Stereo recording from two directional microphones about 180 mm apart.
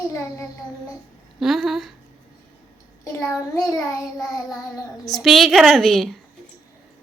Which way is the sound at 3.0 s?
15° left (ahead or behind).